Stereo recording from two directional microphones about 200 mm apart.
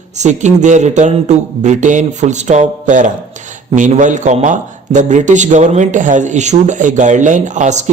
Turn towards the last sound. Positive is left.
turn(degrees=-35)  # may be behind; listen again after turning